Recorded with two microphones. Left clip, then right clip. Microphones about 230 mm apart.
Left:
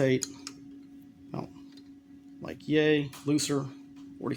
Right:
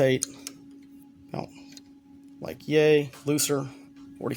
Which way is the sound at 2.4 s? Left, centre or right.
Right.